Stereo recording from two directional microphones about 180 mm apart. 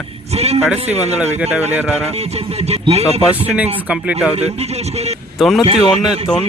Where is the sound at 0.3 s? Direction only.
35° right (ahead or behind).